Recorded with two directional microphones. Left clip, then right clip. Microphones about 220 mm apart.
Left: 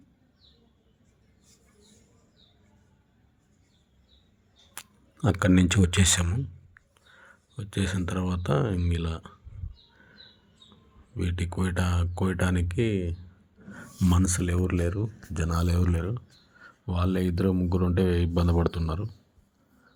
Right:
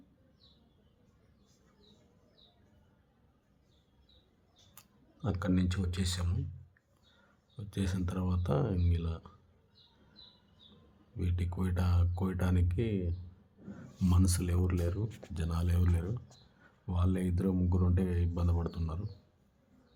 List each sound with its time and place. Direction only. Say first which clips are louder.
4.7 s speech: left 19 dB; 30° left (ahead or behind)
7.5 s speech: left 8 dB; 15° left (ahead or behind)
11.2 s speech: left 8 dB; 20° left (ahead or behind)